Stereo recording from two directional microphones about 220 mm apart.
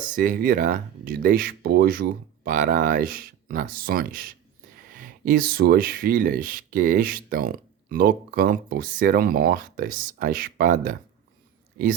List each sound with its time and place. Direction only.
0.0 s speech: 35° right (ahead or behind)